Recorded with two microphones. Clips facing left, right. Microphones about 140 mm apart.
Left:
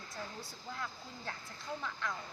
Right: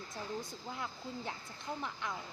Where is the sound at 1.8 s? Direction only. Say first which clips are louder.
Left 1 dB; 20° right (ahead or behind).